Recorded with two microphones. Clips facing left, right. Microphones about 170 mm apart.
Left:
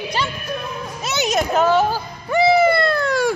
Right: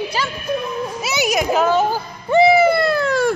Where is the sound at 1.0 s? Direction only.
10° right (ahead or behind).